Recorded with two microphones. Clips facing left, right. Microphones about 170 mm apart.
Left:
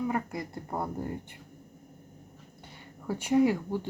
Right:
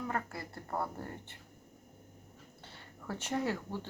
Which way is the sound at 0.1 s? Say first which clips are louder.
Left 6 dB; 15° left (ahead or behind).